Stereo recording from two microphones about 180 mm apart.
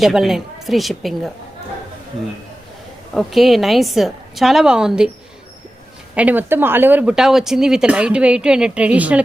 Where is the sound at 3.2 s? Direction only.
Centre (ahead or behind).